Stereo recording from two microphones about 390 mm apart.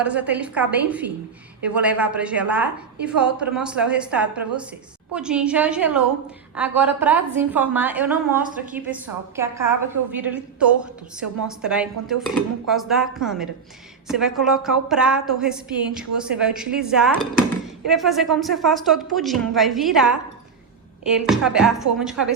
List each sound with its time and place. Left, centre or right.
0.0 s a woman's voice: centre